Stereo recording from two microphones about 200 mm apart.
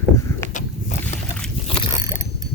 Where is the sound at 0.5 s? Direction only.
35° left (ahead or behind).